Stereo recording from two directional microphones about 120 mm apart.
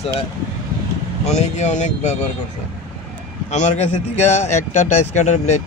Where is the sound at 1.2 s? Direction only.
70° left (ahead or behind).